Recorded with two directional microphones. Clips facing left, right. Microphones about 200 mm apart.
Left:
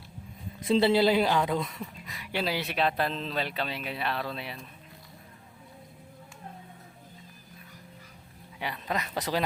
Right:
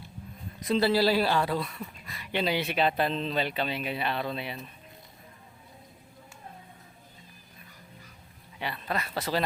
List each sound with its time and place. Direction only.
0.6 s a man's voice: 25° left (ahead or behind); by 4.6 s centre (ahead or behind)
8.5 s speech: 15° left (ahead or behind)